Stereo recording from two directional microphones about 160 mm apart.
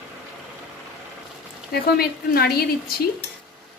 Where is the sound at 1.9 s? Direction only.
75° left (ahead or behind).